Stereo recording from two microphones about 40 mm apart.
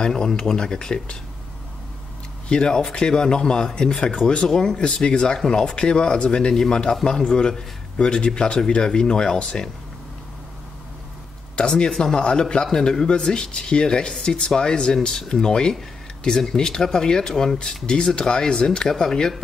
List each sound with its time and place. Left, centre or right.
0.0 s speech: centre
2.5 s speech: left
11.5 s speech: left